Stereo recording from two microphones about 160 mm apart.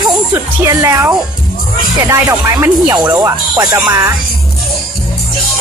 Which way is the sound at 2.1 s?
15° right (ahead or behind).